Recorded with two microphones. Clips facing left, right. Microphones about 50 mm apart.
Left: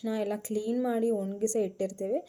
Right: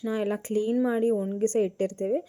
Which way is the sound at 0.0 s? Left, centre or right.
Right.